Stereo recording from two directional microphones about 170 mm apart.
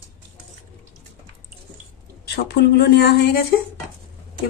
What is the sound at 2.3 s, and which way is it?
Speech, 75° left (ahead or behind).